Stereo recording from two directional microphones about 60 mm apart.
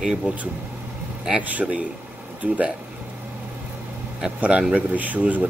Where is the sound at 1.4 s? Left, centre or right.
Right.